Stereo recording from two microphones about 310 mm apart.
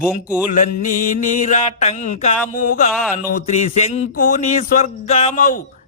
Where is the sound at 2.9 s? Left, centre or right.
Centre.